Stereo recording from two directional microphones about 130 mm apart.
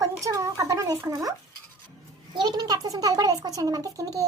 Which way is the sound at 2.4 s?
30° right (ahead or behind).